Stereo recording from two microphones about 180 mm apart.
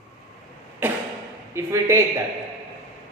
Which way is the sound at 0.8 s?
10° right (ahead or behind).